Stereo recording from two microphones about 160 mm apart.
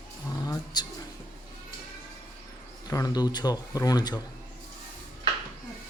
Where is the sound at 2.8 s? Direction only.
20° left (ahead or behind).